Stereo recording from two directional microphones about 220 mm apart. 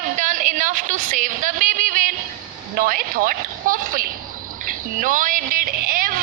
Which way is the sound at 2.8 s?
40° right (ahead or behind).